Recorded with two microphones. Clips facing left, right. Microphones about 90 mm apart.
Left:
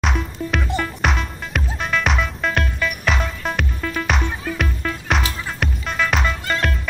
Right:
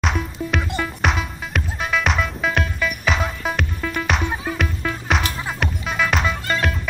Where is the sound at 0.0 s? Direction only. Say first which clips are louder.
Even; centre (ahead or behind).